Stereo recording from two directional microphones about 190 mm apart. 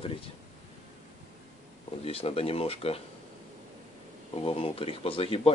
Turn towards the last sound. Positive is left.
turn(degrees=30)  # may be behind; listen again after turning